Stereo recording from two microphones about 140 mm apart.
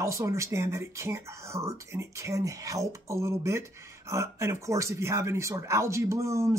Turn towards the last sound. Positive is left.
turn(degrees=-20)  # may be behind; listen again after turning